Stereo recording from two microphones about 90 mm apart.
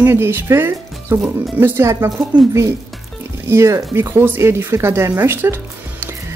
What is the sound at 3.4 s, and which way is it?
Speech, 30° right (ahead or behind).